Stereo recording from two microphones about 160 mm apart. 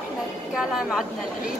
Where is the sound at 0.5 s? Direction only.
Centre (ahead or behind).